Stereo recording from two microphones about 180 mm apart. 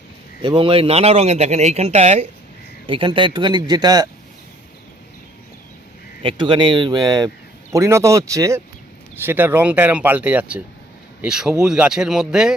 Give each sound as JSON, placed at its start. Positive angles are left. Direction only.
{"t": 0.4, "sound": "speech", "side_deg": -30}
{"t": 6.2, "sound": "speech", "side_deg": -25}